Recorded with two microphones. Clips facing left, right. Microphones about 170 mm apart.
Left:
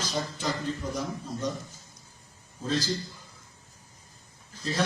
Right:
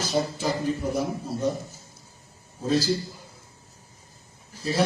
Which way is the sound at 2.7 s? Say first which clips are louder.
Right 6 dB; 10° right (ahead or behind).